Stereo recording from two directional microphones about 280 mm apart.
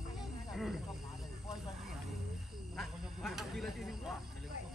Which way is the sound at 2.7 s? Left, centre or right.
Centre.